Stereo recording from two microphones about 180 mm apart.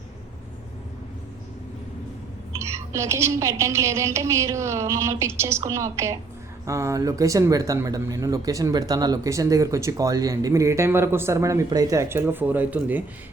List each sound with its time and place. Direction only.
2.7 s speech: 15° right (ahead or behind)